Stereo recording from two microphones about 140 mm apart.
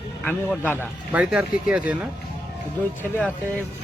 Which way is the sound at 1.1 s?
10° right (ahead or behind).